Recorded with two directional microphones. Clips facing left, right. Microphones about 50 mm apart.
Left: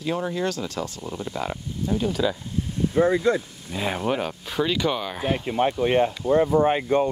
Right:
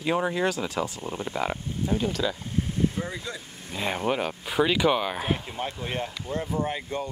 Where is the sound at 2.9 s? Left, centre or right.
Left.